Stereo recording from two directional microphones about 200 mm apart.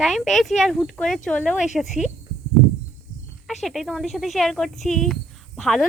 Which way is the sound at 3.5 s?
Centre (ahead or behind).